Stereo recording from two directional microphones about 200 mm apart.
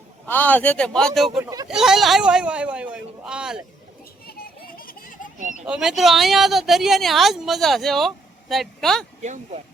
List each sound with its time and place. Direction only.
0.3 s speech: 10° left (ahead or behind)
1.4 s speech: 15° right (ahead or behind)
1.6 s speech: centre (ahead or behind)
4.3 s children playing: 50° left (ahead or behind)
5.6 s speech: 5° right (ahead or behind)
9.2 s speech: 35° right (ahead or behind)